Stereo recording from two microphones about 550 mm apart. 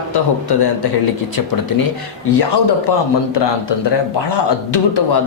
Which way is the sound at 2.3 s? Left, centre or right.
Left.